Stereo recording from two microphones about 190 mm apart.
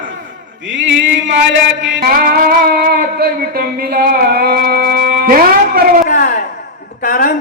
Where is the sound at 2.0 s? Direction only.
50° right (ahead or behind).